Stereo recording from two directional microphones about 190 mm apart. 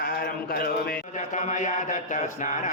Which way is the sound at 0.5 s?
50° left (ahead or behind).